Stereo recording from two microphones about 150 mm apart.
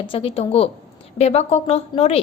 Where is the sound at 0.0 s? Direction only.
40° left (ahead or behind).